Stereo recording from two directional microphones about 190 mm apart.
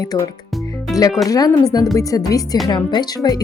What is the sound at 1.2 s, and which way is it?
Speech, 20° left (ahead or behind).